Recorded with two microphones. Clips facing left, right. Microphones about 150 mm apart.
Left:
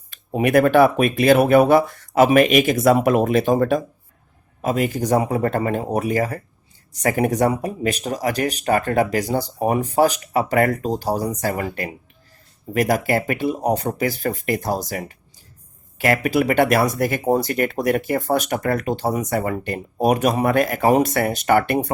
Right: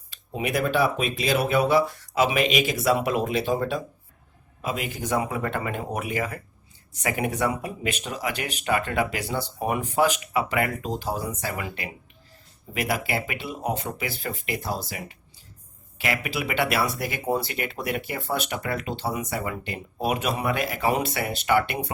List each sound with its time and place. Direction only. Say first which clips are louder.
0.1 s speech: left 10 dB; 50° left (ahead or behind)
16.2 s speech: left 11 dB; 45° left (ahead or behind)